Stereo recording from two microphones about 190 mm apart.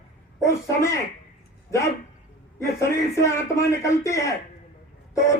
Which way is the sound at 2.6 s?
15° left (ahead or behind).